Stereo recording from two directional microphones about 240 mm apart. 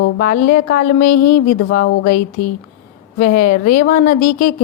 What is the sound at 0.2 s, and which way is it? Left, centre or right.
A woman's voice, left.